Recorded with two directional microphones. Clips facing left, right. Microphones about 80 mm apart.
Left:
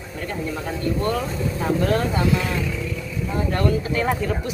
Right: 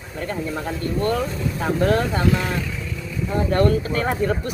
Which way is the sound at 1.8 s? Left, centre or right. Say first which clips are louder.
Right 3 dB; right.